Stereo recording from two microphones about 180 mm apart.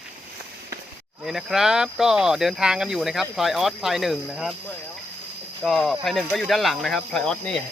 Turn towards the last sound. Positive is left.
turn(degrees=5)  # may be behind; listen again after turning